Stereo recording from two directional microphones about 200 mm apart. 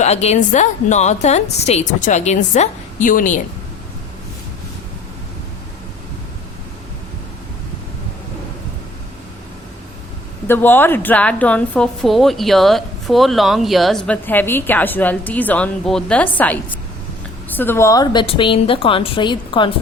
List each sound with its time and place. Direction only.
0.0 s a woman's voice: 35° left (ahead or behind)
10.4 s a woman's voice: 10° left (ahead or behind)